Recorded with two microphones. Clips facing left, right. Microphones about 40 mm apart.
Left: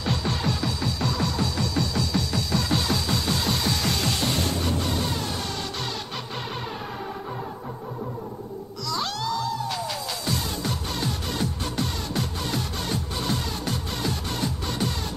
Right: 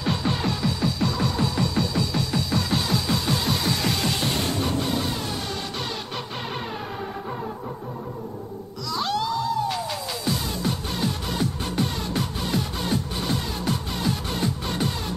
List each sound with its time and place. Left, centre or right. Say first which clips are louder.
0.0 s music: right 2 dB; centre
8.8 s music: right 3 dB; centre